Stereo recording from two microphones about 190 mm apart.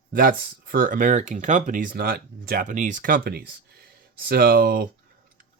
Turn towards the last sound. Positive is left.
turn(degrees=-50)  # may be behind; listen again after turning